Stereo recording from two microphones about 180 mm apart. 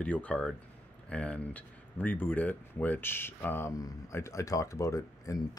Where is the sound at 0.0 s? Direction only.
10° left (ahead or behind).